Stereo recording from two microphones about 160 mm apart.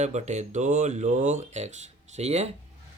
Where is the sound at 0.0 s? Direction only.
45° right (ahead or behind).